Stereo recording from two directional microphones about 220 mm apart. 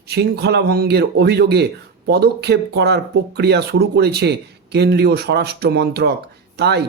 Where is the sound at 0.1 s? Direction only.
45° right (ahead or behind).